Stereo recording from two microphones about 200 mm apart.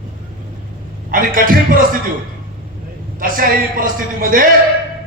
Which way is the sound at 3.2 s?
45° right (ahead or behind).